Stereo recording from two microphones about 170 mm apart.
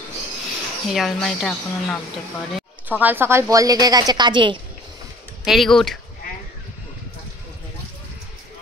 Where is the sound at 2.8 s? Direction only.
10° right (ahead or behind); by 4.6 s 30° right (ahead or behind).